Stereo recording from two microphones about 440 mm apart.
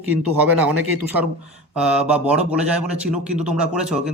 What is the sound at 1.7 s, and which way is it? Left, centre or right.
Speech, centre.